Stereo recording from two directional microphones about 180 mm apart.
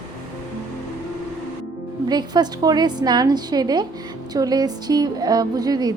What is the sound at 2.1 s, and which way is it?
A woman's voice, 25° right (ahead or behind).